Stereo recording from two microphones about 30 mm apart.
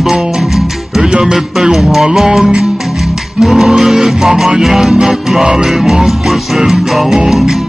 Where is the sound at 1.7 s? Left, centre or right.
Centre.